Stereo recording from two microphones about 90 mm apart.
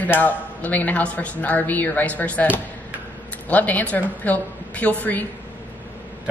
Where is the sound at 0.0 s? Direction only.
20° left (ahead or behind).